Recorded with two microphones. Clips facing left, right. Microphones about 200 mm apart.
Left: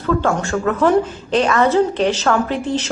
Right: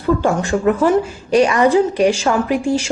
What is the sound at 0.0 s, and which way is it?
A woman's voice, 15° right (ahead or behind).